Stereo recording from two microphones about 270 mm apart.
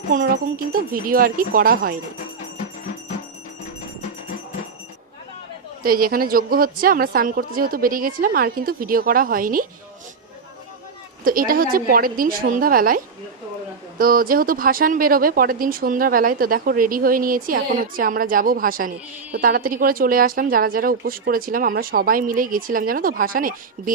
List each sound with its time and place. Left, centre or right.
0.1 s speech: right
5.8 s speech: right
11.3 s speech: right
14.0 s speech: right